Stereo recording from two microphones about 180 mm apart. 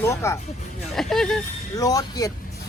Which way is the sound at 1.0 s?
Centre (ahead or behind).